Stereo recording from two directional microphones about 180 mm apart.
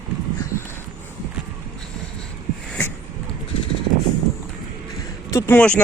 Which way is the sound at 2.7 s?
10° left (ahead or behind).